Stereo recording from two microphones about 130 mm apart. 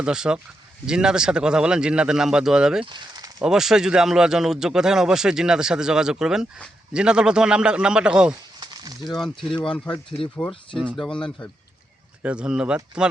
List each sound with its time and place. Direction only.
0.0 s speech: 5° right (ahead or behind)
2.9 s a sound: 30° right (ahead or behind)
3.4 s speech: 5° right (ahead or behind)
8.6 s a sound: 30° right (ahead or behind)
9.0 s speech: centre (ahead or behind)
12.2 s speech: 10° right (ahead or behind)